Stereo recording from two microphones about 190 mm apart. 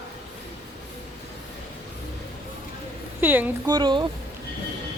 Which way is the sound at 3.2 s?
10° right (ahead or behind).